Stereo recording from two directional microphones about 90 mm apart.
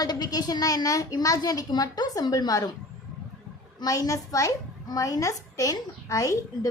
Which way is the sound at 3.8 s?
40° left (ahead or behind).